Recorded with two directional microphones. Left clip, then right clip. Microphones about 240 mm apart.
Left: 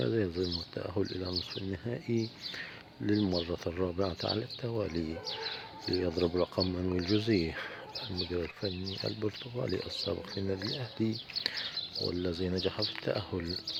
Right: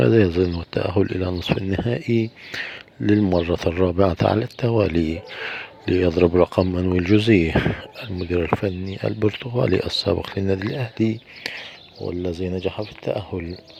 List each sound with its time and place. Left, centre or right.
0.0 s speech: right